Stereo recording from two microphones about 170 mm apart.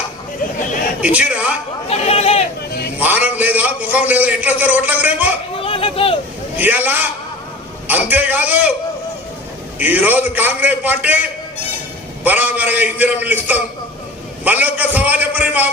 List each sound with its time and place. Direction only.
1.0 s a man's voice: 5° right (ahead or behind)
1.9 s chatter: 35° left (ahead or behind)
3.0 s a man's voice: 10° right (ahead or behind)
5.6 s a sound: 35° left (ahead or behind)
6.6 s a man's voice: 10° right (ahead or behind)
8.1 s a man's voice: 10° right (ahead or behind)
9.7 s a man's voice: 10° right (ahead or behind)